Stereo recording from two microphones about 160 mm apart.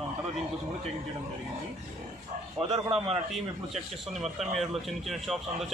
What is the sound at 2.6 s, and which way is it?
Speech, 25° right (ahead or behind).